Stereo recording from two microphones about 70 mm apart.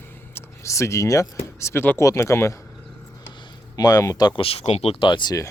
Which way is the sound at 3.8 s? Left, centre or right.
Left.